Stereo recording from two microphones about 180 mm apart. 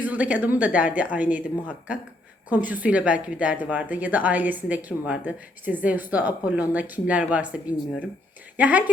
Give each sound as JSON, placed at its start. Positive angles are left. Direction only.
{"t": 0.0, "sound": "a woman's voice", "side_deg": -10}